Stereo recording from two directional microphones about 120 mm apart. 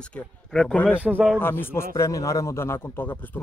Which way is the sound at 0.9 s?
10° right (ahead or behind).